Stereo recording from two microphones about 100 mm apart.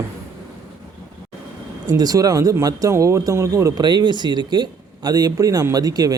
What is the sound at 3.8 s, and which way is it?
Speech, 50° right (ahead or behind).